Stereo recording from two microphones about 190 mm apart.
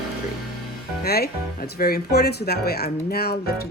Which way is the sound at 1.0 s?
55° left (ahead or behind).